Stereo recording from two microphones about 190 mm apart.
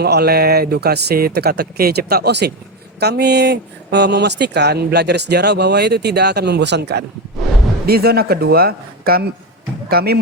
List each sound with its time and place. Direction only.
0.0 s a man's voice: 55° right (ahead or behind)